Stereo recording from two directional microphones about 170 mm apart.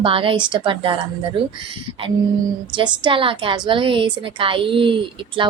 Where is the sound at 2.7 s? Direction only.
30° right (ahead or behind).